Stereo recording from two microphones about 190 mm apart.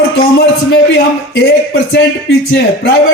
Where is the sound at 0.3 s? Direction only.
60° left (ahead or behind).